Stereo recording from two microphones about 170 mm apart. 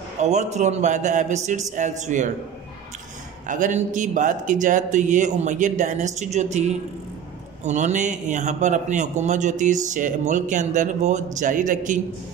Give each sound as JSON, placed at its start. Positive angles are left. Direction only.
{"t": 0.2, "sound": "speech", "side_deg": -40}
{"t": 3.4, "sound": "speech", "side_deg": -45}